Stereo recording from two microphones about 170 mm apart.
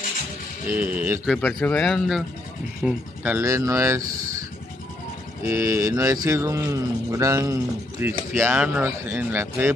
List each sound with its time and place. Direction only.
0.7 s speech: 10° right (ahead or behind)
1.3 s speech: centre (ahead or behind)
3.3 s speech: 20° right (ahead or behind)
5.4 s speech: 15° right (ahead or behind)
8.3 s speech: 10° right (ahead or behind)